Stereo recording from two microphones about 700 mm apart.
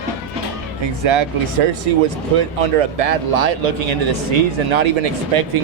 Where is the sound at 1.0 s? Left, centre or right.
Right.